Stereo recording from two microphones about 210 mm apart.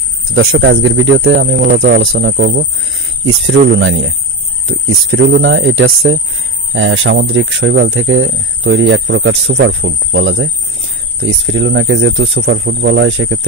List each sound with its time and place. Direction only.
0.3 s speech: 70° right (ahead or behind); by 2.6 s 55° right (ahead or behind)
3.3 s speech: 70° right (ahead or behind)